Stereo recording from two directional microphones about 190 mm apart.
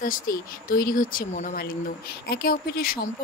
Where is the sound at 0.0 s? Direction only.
50° left (ahead or behind).